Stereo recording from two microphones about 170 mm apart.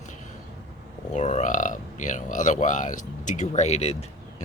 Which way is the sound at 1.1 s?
45° left (ahead or behind).